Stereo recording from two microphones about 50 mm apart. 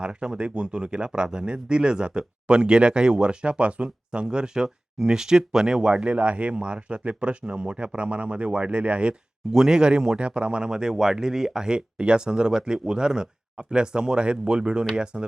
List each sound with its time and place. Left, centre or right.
0.0 s speech: centre